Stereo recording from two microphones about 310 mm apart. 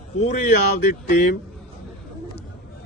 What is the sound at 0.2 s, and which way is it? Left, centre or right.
Speech, left.